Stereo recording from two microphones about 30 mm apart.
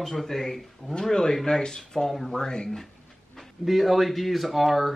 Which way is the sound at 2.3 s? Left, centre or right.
Left.